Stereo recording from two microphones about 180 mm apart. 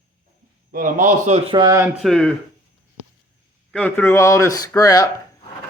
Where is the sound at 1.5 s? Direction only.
20° right (ahead or behind).